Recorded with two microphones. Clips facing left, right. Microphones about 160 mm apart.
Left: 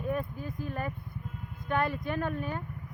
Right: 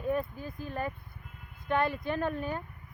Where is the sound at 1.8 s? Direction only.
30° right (ahead or behind).